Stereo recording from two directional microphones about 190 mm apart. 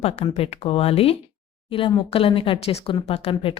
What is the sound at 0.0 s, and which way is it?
Speech, 30° left (ahead or behind).